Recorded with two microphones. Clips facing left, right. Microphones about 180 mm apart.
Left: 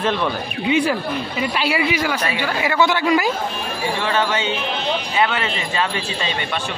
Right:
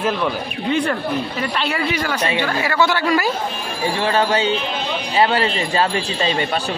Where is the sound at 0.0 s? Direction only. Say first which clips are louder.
Even; centre (ahead or behind); by 3.3 s 15° left (ahead or behind).